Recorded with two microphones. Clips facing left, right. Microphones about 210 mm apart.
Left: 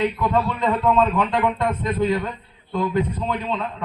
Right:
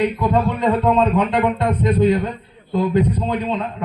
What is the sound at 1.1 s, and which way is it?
A man's voice, 20° right (ahead or behind).